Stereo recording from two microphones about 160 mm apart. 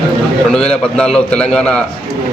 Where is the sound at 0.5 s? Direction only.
5° left (ahead or behind).